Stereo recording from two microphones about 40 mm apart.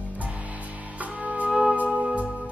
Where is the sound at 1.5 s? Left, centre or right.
Centre.